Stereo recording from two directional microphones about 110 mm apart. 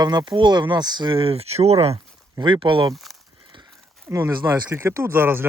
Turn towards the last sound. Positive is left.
turn(degrees=-20)  # may be behind; listen again after turning